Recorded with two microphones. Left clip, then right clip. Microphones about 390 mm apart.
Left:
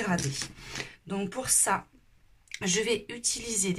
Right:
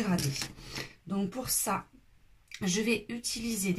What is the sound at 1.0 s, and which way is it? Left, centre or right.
Speech, left.